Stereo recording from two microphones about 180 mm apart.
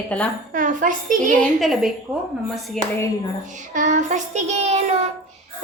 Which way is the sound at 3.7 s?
45° right (ahead or behind).